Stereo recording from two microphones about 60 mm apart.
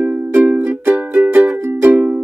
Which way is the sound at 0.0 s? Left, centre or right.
Right.